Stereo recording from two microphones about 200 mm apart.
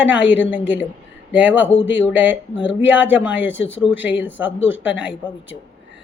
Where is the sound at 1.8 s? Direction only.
65° left (ahead or behind).